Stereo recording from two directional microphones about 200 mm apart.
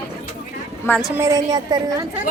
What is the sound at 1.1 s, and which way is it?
Speech, 15° right (ahead or behind).